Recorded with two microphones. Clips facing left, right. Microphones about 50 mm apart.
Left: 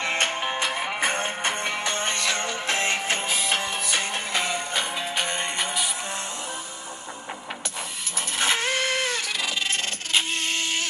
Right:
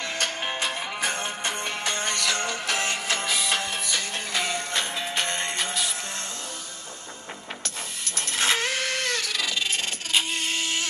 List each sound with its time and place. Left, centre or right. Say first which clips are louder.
0.0 s music: left 4 dB; left; by 5.9 s centre
8.4 s vehicle: left 1 dB; centre